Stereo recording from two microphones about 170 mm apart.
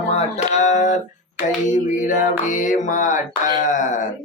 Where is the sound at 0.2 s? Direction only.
45° left (ahead or behind).